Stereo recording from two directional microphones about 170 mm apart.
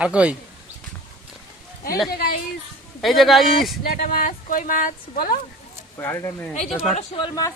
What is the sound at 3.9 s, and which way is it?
Speech, 55° left (ahead or behind).